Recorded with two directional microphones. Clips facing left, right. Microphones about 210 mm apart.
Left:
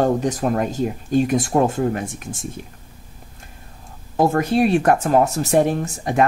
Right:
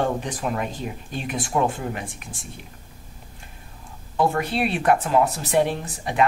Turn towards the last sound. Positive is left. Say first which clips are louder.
# left 6 dB
turn(degrees=45)  # may be behind; listen again after turning